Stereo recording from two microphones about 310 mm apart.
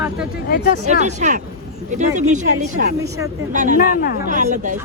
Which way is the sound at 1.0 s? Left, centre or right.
Right.